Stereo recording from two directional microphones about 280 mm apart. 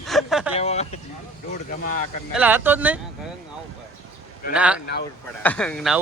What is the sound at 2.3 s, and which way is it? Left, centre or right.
Speech, centre.